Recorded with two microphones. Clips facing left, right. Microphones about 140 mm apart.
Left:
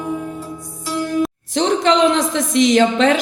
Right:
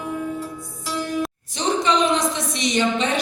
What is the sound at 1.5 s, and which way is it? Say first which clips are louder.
A woman's voice: left 5 dB; 90° left.